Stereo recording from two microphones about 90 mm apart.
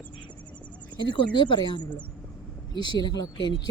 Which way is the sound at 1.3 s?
60° left (ahead or behind).